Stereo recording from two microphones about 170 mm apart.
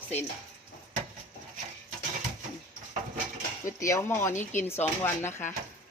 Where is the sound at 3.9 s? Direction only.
15° left (ahead or behind).